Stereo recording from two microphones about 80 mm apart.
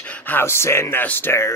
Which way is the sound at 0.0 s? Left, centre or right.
Left.